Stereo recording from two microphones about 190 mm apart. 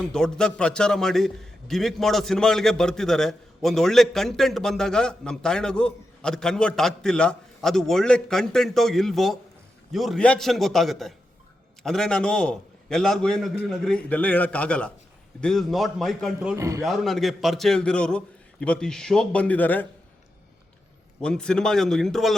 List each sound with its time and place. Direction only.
0.1 s a man's voice: 5° left (ahead or behind)
16.6 s a man's voice: 15° right (ahead or behind)
16.8 s a man's voice: centre (ahead or behind)
21.2 s a man's voice: 5° left (ahead or behind)